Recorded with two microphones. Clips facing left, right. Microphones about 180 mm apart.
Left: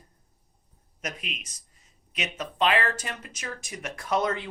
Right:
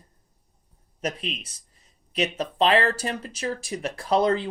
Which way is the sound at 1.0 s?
35° right (ahead or behind).